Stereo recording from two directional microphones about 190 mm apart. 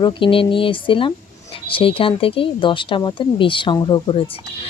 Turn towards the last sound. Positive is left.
turn(degrees=30)  # may be behind; listen again after turning